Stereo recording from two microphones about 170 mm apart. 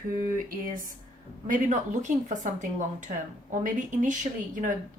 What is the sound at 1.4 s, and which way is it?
A woman's voice, 45° right (ahead or behind).